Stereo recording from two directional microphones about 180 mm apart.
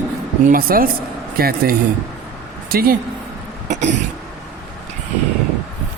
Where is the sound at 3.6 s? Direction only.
40° right (ahead or behind).